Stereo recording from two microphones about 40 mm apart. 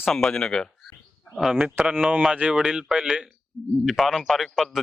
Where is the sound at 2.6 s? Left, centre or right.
Centre.